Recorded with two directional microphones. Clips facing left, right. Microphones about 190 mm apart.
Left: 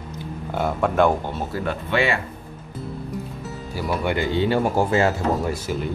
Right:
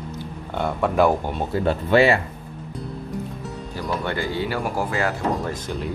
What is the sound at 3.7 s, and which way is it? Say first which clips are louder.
Speech: left 3 dB; 10° left (ahead or behind).